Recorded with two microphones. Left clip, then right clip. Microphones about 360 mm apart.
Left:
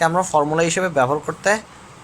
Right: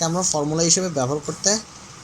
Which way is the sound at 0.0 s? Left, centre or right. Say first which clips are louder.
Left 6 dB; left.